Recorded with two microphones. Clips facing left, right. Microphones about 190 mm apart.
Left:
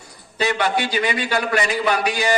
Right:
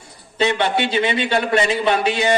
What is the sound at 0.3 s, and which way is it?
A man's voice, 25° right (ahead or behind).